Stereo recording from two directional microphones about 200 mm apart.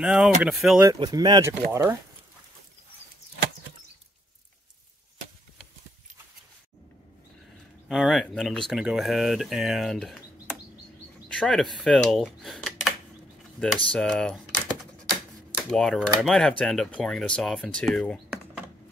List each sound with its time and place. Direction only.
0.0 s speech: 5° right (ahead or behind)
0.9 s speech: 20° right (ahead or behind)
7.9 s speech: centre (ahead or behind)
11.2 s a sound: 5° left (ahead or behind)
11.8 s speech: 5° left (ahead or behind)
13.8 s typing: 5° left (ahead or behind)
15.5 s speech: 5° left (ahead or behind)